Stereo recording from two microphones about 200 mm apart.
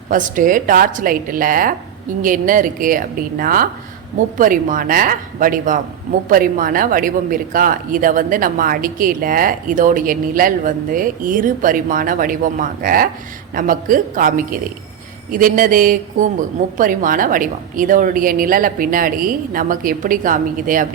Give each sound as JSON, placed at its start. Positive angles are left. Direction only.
{"t": 0.1, "sound": "speech", "side_deg": -40}